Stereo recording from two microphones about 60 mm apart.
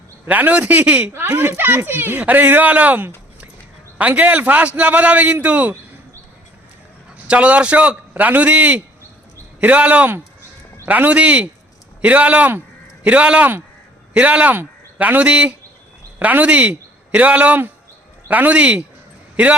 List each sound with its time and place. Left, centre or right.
0.3 s a man's voice: right
1.4 s a man's voice: right
7.3 s a man's voice: right